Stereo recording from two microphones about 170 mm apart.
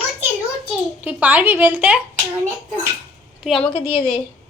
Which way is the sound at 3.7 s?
35° left (ahead or behind).